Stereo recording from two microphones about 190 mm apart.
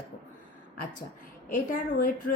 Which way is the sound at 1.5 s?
45° left (ahead or behind).